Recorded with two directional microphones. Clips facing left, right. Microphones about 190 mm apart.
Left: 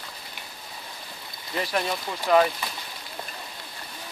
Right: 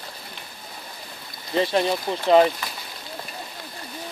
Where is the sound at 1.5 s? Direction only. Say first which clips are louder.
Right 6 dB; 25° right (ahead or behind).